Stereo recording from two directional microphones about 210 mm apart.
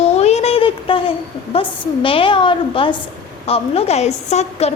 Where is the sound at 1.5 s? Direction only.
25° left (ahead or behind).